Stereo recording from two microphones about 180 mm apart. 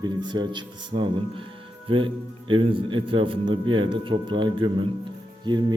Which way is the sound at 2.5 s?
30° right (ahead or behind).